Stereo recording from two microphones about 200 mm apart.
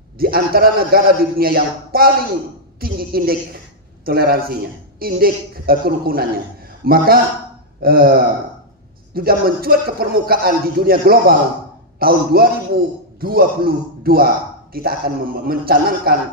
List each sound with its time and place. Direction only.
0.2 s a man's voice: 50° right (ahead or behind)